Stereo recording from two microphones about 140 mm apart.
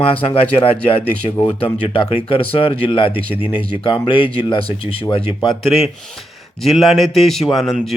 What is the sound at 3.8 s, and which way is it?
Speech, 35° left (ahead or behind).